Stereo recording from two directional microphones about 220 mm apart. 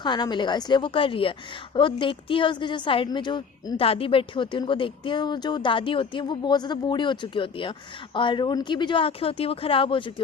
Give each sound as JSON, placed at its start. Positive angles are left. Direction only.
{"t": 0.0, "sound": "a woman's voice", "side_deg": 20}